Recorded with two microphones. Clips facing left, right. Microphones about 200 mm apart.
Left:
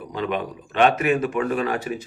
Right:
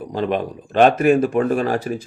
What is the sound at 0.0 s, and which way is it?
Speech, 35° right (ahead or behind).